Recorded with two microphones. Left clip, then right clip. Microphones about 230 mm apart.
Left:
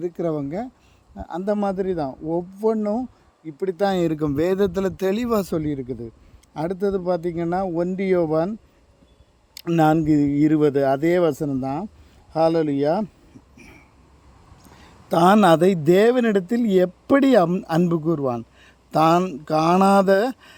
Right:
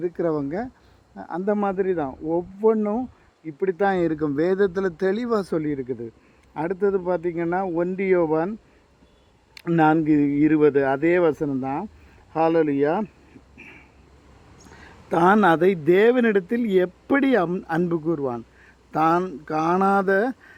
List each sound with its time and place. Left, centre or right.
0.0 s a man's voice: left
5.5 s speech: left
9.6 s speech: left
13.6 s a sound: left
14.8 s a man's voice: left
18.6 s speech: left